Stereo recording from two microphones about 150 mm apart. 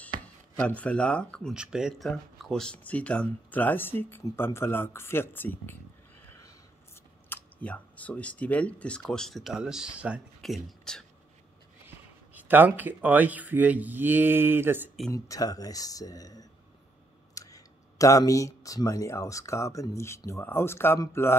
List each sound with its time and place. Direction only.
0.6 s speech: 10° left (ahead or behind)
1.5 s speech: 5° right (ahead or behind); by 5.8 s 15° left (ahead or behind)
7.2 s speech: 10° left (ahead or behind)
12.4 s speech: 10° right (ahead or behind)
15.0 s speech: 25° left (ahead or behind)